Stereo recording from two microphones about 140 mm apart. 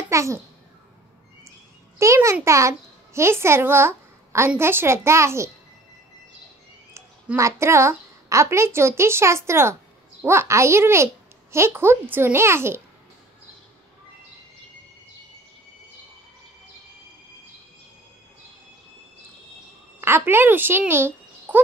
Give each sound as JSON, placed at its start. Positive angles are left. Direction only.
{"t": 0.1, "sound": "a child's voice", "side_deg": -20}
{"t": 2.0, "sound": "a child's voice", "side_deg": -20}
{"t": 7.3, "sound": "a woman's voice", "side_deg": -20}
{"t": 20.0, "sound": "speech", "side_deg": -15}